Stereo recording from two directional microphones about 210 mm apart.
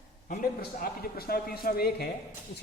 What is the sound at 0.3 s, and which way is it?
A woman's voice, 45° left (ahead or behind).